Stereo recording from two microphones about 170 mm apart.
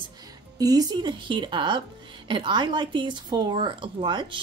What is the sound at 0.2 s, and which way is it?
A woman's voice, 20° right (ahead or behind).